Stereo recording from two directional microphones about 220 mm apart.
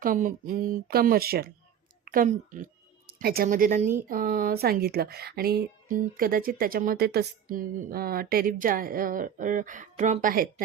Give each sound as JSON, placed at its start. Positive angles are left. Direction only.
{"t": 0.0, "sound": "a woman's voice", "side_deg": -40}